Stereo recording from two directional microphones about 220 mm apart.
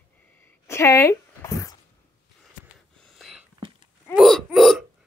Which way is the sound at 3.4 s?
25° right (ahead or behind).